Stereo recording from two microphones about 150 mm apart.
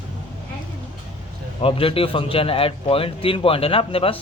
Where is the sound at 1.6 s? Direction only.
40° left (ahead or behind).